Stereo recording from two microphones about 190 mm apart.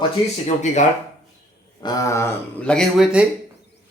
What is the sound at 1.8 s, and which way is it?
Speech, 15° left (ahead or behind).